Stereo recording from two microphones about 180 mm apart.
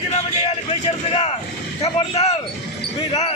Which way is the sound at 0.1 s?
30° left (ahead or behind).